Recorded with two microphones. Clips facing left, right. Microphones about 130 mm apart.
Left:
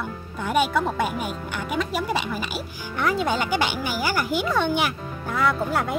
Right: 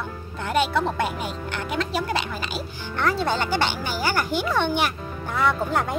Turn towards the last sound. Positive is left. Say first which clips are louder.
# even
turn(degrees=0)  # may be behind; listen again after turning